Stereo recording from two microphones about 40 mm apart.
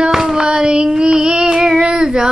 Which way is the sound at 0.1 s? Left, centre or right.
Centre.